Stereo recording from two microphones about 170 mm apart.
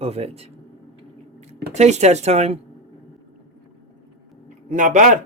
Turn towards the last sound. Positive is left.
turn(degrees=-50)  # may be behind; listen again after turning